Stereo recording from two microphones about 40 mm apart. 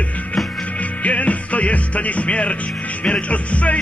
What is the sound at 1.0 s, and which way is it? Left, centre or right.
Music, left.